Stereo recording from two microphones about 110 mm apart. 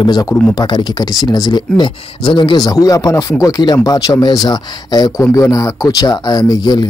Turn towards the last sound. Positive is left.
turn(degrees=40)  # may be behind; listen again after turning